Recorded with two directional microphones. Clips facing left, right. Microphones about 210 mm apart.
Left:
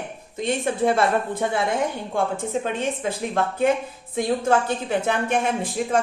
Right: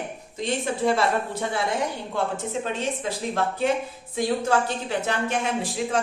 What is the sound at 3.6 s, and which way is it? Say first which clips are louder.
A woman's voice: left 3 dB; 55° left (ahead or behind).